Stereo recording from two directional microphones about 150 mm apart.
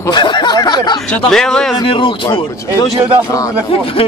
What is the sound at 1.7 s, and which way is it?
A man's voice, 35° left (ahead or behind).